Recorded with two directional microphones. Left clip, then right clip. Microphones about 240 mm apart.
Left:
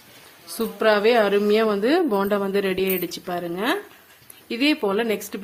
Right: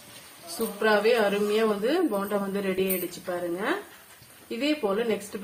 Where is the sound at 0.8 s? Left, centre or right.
Left.